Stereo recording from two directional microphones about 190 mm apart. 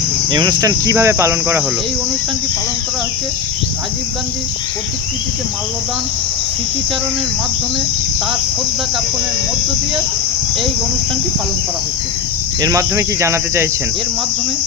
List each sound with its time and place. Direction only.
0.3 s cricket: 20° right (ahead or behind)
12.6 s cricket: 15° right (ahead or behind)